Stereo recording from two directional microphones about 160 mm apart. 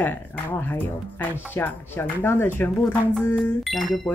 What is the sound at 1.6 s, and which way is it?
Speech, 15° left (ahead or behind).